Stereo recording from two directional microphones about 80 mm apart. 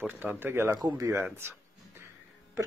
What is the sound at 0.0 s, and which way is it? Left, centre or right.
Speech, right.